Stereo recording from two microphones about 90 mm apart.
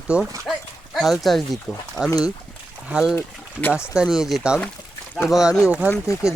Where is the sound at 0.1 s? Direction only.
10° right (ahead or behind).